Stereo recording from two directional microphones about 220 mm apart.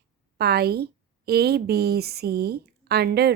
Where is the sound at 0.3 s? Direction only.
45° right (ahead or behind).